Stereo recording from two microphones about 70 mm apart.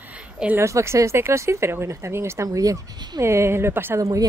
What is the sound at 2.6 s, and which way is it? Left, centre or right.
Speech, right.